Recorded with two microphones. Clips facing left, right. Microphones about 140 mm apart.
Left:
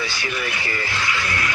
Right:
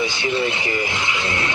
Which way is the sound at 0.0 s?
20° right (ahead or behind).